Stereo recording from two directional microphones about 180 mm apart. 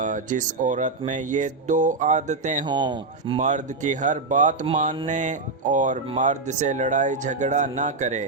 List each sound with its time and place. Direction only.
0.0 s speech: 45° right (ahead or behind)
2.6 s speech: 25° right (ahead or behind)
3.4 s speech: 45° right (ahead or behind)